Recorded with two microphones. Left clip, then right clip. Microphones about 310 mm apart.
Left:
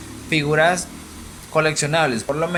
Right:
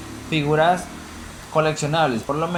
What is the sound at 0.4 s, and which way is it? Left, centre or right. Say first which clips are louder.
Speech: even; left.